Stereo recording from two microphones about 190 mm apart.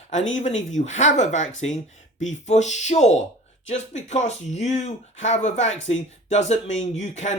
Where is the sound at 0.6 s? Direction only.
40° left (ahead or behind).